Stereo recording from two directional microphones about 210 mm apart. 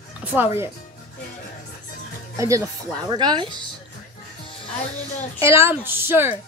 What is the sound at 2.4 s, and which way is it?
Speech, 15° right (ahead or behind).